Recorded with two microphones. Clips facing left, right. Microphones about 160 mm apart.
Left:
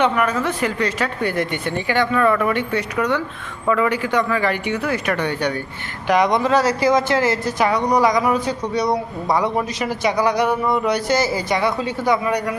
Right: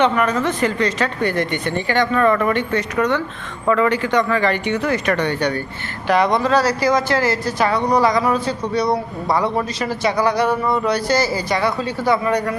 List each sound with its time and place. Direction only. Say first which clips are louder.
0.0 s speech: right 2 dB; 10° left (ahead or behind)